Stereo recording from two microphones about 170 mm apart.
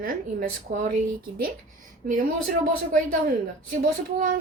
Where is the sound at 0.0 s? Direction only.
55° right (ahead or behind).